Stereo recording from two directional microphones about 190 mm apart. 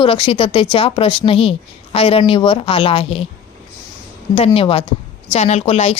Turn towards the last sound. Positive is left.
turn(degrees=35)  # may be behind; listen again after turning